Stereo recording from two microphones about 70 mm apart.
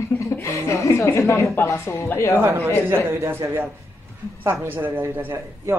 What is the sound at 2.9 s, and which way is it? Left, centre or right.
A man's voice, right.